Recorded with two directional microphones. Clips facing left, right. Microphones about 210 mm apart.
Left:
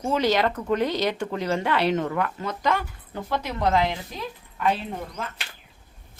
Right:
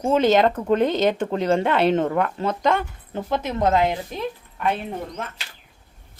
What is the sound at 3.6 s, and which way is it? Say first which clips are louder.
Speech: right 3 dB; 45° right (ahead or behind).